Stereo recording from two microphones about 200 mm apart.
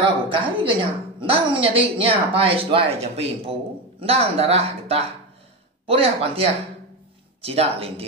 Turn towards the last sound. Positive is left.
turn(degrees=-30)  # may be behind; listen again after turning